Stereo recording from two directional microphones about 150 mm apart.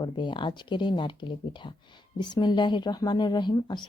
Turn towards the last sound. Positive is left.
turn(degrees=30)  # may be behind; listen again after turning